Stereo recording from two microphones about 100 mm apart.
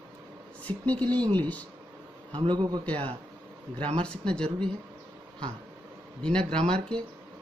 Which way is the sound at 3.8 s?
70° right (ahead or behind).